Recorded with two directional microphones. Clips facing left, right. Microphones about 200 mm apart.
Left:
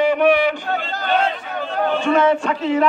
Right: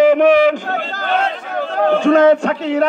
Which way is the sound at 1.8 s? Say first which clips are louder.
Right 6 dB; 90° right.